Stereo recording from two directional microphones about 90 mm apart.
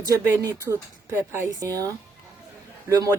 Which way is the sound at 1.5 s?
40° right (ahead or behind).